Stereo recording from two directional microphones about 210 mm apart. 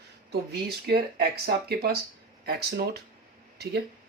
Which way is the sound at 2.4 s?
50° right (ahead or behind).